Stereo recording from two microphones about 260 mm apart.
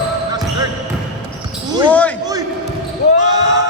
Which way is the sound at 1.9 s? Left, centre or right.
Centre.